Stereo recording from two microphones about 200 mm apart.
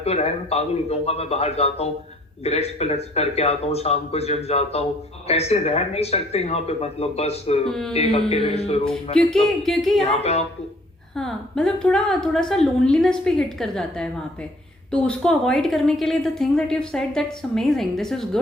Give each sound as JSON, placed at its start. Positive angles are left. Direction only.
{"t": 0.0, "sound": "speech", "side_deg": 30}
{"t": 7.7, "sound": "a woman's voice", "side_deg": 0}
{"t": 7.9, "sound": "speech", "side_deg": 30}
{"t": 9.2, "sound": "a woman's voice", "side_deg": 5}
{"t": 10.0, "sound": "speech", "side_deg": 30}
{"t": 11.2, "sound": "a woman's voice", "side_deg": 0}